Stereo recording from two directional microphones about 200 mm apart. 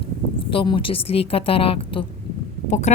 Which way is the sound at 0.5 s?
25° left (ahead or behind).